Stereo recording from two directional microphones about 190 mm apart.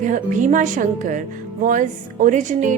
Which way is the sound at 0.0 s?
40° right (ahead or behind).